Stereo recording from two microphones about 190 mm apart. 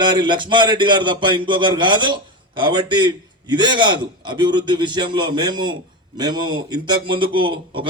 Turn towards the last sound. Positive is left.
turn(degrees=-25)  # may be behind; listen again after turning